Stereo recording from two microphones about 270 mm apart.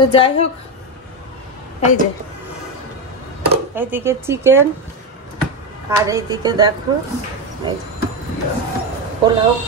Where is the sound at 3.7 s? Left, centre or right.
Centre.